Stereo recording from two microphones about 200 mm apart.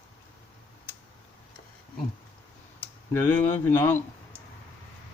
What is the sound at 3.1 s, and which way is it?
Speech, 10° left (ahead or behind).